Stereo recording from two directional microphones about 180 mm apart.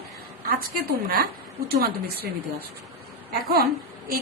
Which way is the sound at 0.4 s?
55° right (ahead or behind).